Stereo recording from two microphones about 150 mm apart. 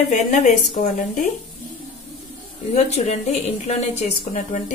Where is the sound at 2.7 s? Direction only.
50° left (ahead or behind).